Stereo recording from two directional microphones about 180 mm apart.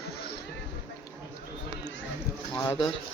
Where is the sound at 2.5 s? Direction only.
15° left (ahead or behind).